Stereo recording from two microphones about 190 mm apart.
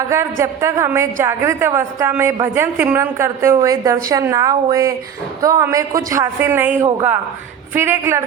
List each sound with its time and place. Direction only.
0.1 s a woman's voice: 15° right (ahead or behind)